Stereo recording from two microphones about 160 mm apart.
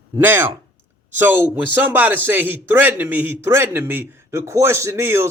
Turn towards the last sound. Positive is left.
turn(degrees=-15)  # may be behind; listen again after turning